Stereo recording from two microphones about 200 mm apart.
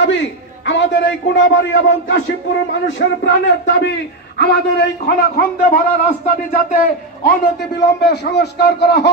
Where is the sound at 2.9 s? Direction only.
60° left (ahead or behind).